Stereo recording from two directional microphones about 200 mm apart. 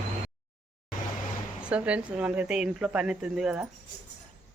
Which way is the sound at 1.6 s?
5° right (ahead or behind).